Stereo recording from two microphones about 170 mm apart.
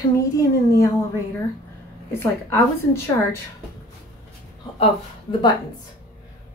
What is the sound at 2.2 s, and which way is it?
A woman's voice, 15° left (ahead or behind).